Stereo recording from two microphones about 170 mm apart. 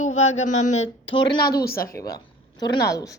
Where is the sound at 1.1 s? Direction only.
25° left (ahead or behind).